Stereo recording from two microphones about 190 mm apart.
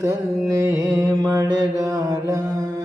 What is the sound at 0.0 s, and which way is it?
Mantra, 15° right (ahead or behind).